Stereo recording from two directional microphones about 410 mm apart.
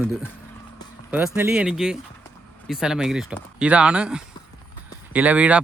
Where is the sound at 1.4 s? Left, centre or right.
Centre.